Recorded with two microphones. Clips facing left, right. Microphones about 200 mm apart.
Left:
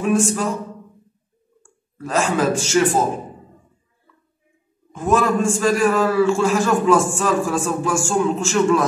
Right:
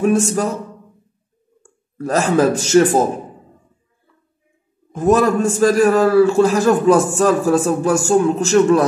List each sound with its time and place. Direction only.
0.0 s speech: 45° right (ahead or behind)
1.6 s speech: 40° right (ahead or behind)
4.9 s a man's voice: 40° right (ahead or behind)